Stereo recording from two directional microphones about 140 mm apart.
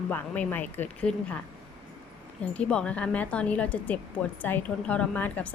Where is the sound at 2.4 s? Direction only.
10° left (ahead or behind).